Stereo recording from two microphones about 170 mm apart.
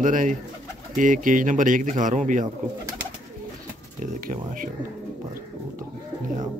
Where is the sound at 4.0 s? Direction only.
55° right (ahead or behind).